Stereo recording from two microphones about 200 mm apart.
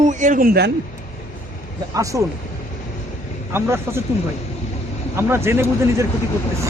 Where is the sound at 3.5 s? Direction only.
10° right (ahead or behind).